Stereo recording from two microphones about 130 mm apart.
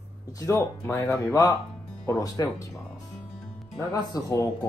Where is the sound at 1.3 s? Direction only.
30° left (ahead or behind).